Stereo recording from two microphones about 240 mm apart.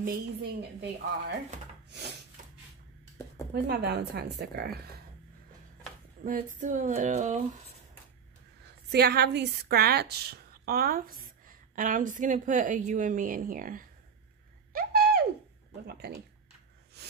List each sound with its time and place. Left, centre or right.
0.0 s a woman's voice: right
1.9 s snort: right
3.6 s a woman's voice: right
6.2 s a woman's voice: right
8.9 s a woman's voice: right
14.7 s a sound: right
17.0 s a sound: right